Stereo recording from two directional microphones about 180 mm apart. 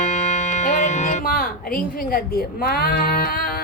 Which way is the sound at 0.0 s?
40° left (ahead or behind).